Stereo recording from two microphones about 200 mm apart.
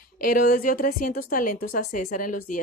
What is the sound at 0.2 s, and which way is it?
A woman's voice, 45° left (ahead or behind).